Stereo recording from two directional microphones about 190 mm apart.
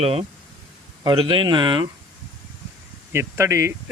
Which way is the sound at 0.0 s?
30° right (ahead or behind).